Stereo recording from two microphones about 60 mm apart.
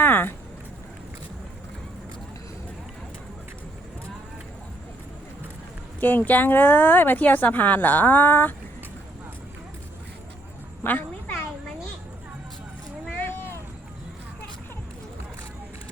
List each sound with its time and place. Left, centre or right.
0.0 s a sound: left
6.0 s speech: left
10.8 s a woman's voice: left
13.1 s vehicle: left